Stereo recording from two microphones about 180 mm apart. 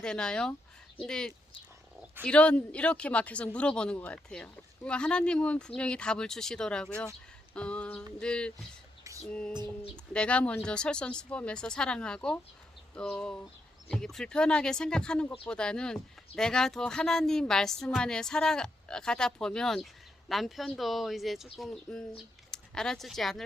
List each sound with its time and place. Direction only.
0.0 s speech: 5° left (ahead or behind)
9.1 s a sound: 20° right (ahead or behind)
10.1 s speech: 5° left (ahead or behind)